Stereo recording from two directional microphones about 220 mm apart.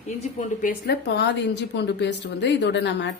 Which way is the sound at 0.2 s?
35° left (ahead or behind).